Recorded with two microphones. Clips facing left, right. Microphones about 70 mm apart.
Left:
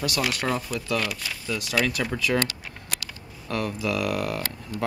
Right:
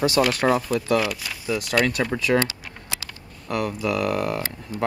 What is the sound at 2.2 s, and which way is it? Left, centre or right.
Speech, right.